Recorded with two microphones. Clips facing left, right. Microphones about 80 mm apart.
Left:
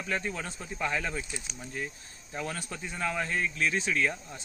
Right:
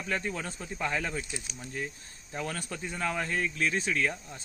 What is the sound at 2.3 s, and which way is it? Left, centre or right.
Speech, left.